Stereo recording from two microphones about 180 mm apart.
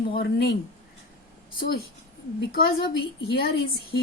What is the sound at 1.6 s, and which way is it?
A woman's voice, 60° left (ahead or behind).